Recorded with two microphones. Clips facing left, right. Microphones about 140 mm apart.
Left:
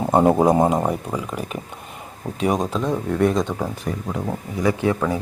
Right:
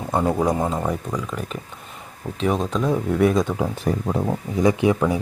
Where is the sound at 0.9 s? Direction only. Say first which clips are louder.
Left 1 dB; 10° left (ahead or behind).